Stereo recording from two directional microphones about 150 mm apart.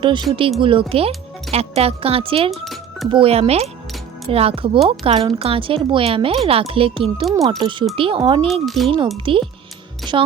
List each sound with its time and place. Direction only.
0.0 s speech: 30° right (ahead or behind)
2.5 s music: centre (ahead or behind)
3.1 s speech: 40° right (ahead or behind)
8.6 s speech: centre (ahead or behind)
9.1 s speech: 35° right (ahead or behind)